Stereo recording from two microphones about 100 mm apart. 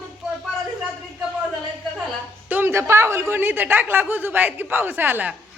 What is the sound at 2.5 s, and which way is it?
A man's voice, 20° right (ahead or behind).